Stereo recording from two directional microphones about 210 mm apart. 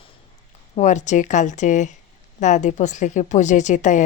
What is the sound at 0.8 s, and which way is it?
A woman's voice, 35° left (ahead or behind).